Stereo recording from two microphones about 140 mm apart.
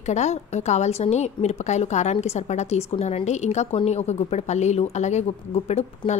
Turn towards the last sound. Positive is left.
turn(degrees=55)  # may be behind; listen again after turning